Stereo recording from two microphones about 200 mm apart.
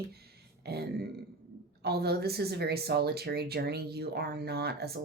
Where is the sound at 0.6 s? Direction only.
55° right (ahead or behind).